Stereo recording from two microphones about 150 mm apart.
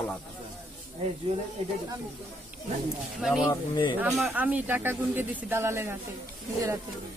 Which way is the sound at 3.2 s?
Centre (ahead or behind).